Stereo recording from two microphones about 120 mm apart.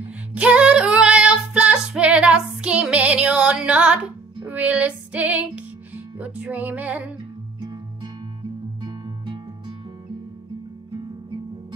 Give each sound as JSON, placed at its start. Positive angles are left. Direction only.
{"t": 0.3, "sound": "female singing", "side_deg": -10}
{"t": 6.1, "sound": "music", "side_deg": -10}
{"t": 8.8, "sound": "music", "side_deg": -40}